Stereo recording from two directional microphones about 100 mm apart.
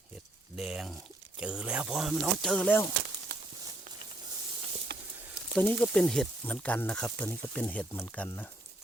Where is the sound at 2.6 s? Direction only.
15° left (ahead or behind).